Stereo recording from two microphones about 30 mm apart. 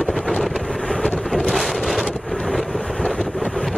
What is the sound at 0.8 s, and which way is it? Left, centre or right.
Vehicle, centre.